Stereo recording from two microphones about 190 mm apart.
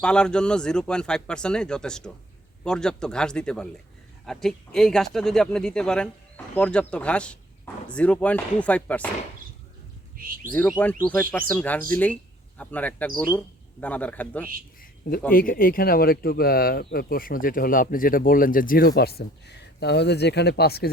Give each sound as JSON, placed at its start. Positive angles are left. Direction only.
{"t": 0.0, "sound": "speech", "side_deg": 5}
{"t": 10.2, "sound": "bird", "side_deg": -45}
{"t": 11.0, "sound": "speech", "side_deg": 10}
{"t": 15.3, "sound": "speech", "side_deg": 50}
{"t": 18.9, "sound": "speech", "side_deg": 55}